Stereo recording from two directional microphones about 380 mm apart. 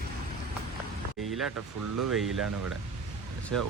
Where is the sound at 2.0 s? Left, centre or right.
Right.